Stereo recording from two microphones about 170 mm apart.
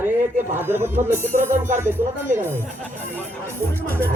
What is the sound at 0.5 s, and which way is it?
Music, 15° right (ahead or behind).